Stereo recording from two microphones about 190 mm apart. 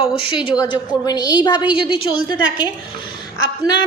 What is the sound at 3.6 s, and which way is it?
Speech, 20° left (ahead or behind).